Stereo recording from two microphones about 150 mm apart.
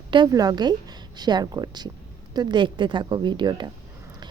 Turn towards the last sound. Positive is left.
turn(degrees=-30)  # may be behind; listen again after turning